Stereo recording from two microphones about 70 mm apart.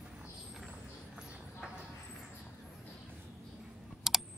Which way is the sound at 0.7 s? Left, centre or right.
Centre.